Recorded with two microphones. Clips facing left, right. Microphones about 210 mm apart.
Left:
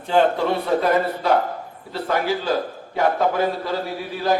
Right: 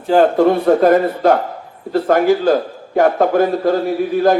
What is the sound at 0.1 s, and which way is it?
A man's voice, 50° right (ahead or behind).